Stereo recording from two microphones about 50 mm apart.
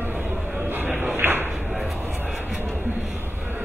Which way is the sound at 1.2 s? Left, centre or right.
Right.